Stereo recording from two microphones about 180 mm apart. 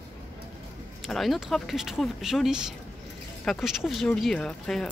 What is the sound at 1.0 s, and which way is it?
Speech, centre (ahead or behind).